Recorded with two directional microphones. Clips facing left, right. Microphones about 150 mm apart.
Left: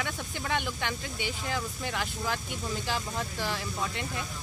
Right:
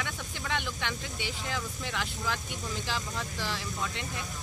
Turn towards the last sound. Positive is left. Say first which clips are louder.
# left 2 dB
turn(degrees=50)  # may be behind; listen again after turning